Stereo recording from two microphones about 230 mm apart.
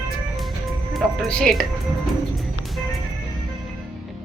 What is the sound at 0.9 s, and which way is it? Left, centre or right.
Speech, centre.